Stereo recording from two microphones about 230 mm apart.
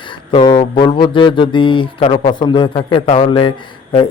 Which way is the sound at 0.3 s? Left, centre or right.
Left.